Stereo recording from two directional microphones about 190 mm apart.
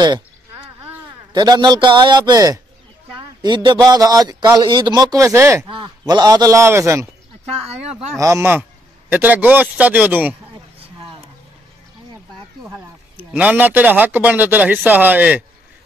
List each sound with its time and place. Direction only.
1.3 s a man's voice: 20° right (ahead or behind)
8.2 s speech: 15° right (ahead or behind)
13.2 s speech: 10° right (ahead or behind)